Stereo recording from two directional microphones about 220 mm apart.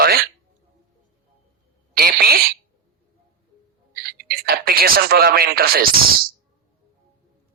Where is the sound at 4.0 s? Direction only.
45° right (ahead or behind).